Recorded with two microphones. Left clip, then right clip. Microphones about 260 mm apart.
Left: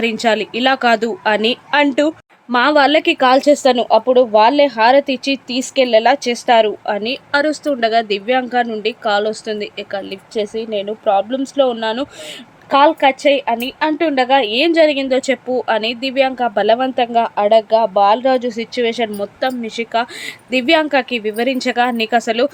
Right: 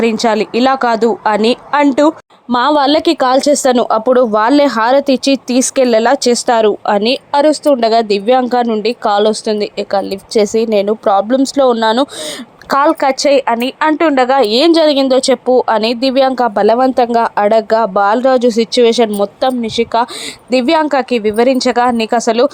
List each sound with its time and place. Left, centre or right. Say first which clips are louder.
0.0 s speech: right 4 dB; centre
11.0 s a woman's voice: right 5 dB; centre
11.8 s a woman's voice: right 8 dB; right